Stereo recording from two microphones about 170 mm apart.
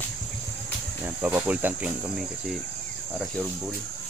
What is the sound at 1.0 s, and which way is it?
Speech, 10° right (ahead or behind).